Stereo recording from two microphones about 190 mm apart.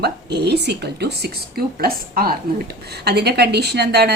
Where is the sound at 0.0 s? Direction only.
60° right (ahead or behind).